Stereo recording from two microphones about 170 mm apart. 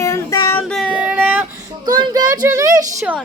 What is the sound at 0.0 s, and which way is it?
Child singing, 20° left (ahead or behind).